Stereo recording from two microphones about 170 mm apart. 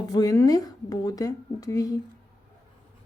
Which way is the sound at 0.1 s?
20° left (ahead or behind).